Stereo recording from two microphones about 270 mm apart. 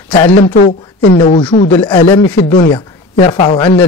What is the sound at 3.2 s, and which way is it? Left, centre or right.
Speech, centre.